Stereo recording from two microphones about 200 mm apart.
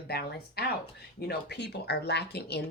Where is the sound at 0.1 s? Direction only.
55° left (ahead or behind).